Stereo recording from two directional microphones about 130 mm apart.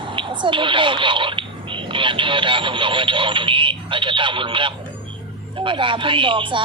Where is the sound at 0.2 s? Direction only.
40° right (ahead or behind).